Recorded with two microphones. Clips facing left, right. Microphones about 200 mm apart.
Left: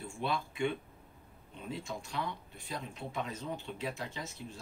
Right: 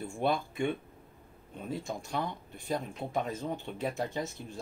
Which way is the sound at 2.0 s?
50° right (ahead or behind).